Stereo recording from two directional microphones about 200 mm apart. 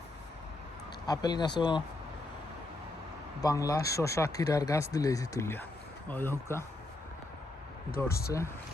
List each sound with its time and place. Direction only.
1.0 s speech: 20° left (ahead or behind)
3.4 s speech: 15° left (ahead or behind)
8.0 s speech: 10° left (ahead or behind)